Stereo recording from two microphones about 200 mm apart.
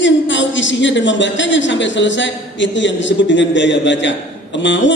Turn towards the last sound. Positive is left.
turn(degrees=65)  # may be behind; listen again after turning